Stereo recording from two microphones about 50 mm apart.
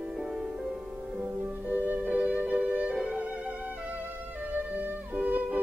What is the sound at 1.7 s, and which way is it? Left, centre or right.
Music, right.